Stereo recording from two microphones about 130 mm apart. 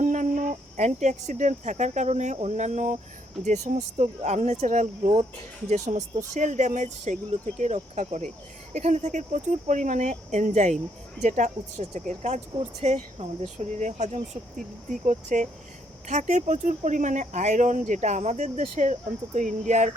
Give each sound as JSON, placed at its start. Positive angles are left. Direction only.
{"t": 0.0, "sound": "speech", "side_deg": -75}
{"t": 4.6, "sound": "speech", "side_deg": -75}
{"t": 12.8, "sound": "speech", "side_deg": -55}